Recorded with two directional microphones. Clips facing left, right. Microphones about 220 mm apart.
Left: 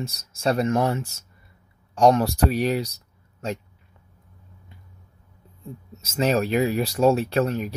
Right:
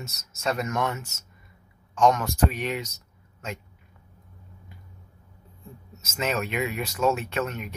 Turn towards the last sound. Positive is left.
turn(degrees=35)  # may be behind; listen again after turning